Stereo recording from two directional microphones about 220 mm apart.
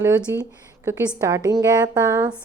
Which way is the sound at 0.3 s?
10° right (ahead or behind).